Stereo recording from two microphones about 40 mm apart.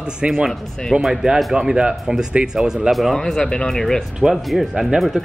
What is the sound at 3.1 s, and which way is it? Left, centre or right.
Speech, centre.